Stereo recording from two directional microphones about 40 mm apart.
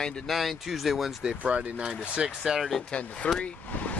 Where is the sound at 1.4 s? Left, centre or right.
Right.